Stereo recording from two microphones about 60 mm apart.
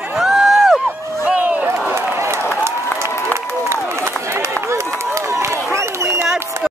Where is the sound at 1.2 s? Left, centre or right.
Right.